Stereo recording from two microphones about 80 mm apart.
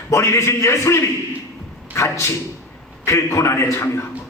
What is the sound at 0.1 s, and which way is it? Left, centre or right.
A man's voice, left.